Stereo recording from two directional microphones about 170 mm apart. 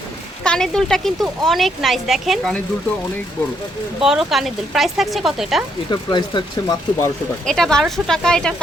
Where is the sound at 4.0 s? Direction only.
Centre (ahead or behind).